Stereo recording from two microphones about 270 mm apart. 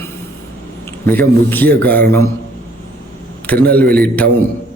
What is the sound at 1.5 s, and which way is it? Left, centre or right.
Speech, centre.